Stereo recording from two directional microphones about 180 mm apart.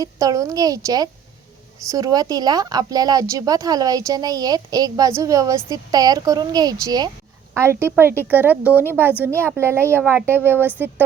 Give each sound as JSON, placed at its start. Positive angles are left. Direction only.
{"t": 0.0, "sound": "a woman's voice", "side_deg": -20}